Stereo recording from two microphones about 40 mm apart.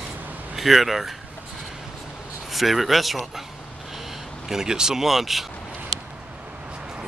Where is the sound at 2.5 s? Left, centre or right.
Centre.